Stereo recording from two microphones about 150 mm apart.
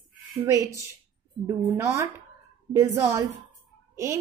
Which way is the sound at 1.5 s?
20° right (ahead or behind).